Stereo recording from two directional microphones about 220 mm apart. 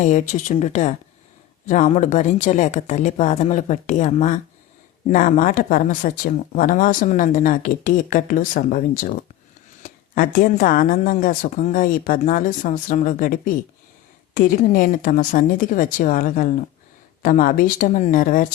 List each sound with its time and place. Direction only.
0.0 s speech: 35° left (ahead or behind)